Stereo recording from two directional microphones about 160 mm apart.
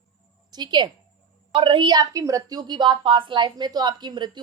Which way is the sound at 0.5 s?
25° right (ahead or behind).